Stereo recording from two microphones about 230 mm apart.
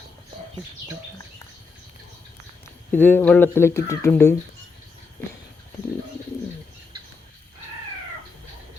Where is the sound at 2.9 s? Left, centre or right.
Centre.